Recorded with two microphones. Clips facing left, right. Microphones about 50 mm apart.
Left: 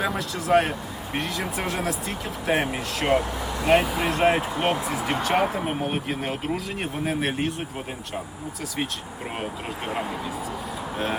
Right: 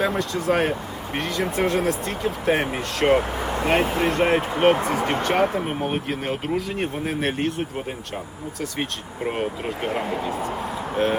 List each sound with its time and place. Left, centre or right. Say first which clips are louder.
0.0 s speech: right 4 dB; centre
3.1 s speech: right 2 dB; right
3.7 s speech: left 1 dB; centre
4.5 s speech: right 6 dB; right
4.8 s speech: right 3 dB; centre
8.8 s speech: right 2 dB; centre